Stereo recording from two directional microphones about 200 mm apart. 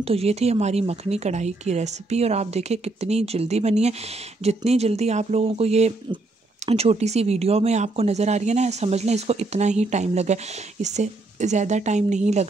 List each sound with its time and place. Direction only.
0.0 s speech: 30° right (ahead or behind)